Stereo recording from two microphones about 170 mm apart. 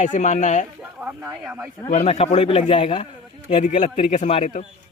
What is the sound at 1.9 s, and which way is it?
Speech, 40° left (ahead or behind).